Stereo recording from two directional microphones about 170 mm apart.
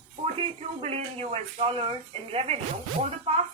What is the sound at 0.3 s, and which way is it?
Speech, 40° right (ahead or behind).